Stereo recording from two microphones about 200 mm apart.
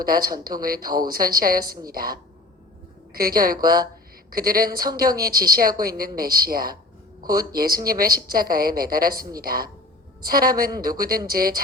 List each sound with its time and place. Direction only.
0.0 s a woman's voice: 45° right (ahead or behind)